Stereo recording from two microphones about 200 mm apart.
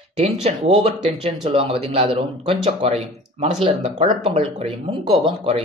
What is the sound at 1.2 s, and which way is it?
Speech, 25° right (ahead or behind).